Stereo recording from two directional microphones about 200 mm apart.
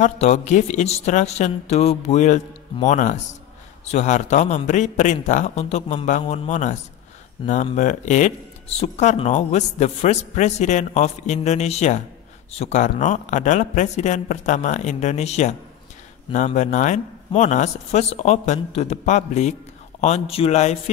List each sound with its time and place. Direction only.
0.0 s speech: 35° left (ahead or behind)